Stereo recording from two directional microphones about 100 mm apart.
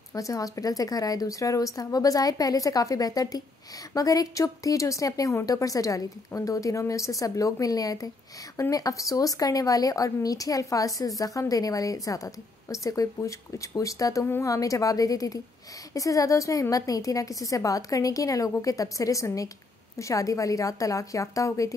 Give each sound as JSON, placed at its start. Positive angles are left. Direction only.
{"t": 0.1, "sound": "a woman's voice", "side_deg": 35}